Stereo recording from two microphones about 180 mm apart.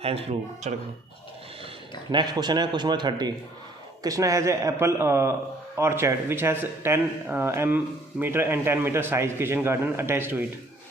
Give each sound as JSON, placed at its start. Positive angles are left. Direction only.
{"t": 0.0, "sound": "speech", "side_deg": -35}
{"t": 2.1, "sound": "a man's voice", "side_deg": -25}